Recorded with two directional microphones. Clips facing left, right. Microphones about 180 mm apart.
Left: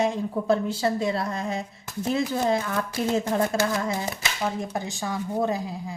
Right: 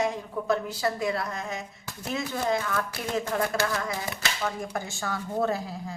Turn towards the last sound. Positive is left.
turn(degrees=15)  # may be behind; listen again after turning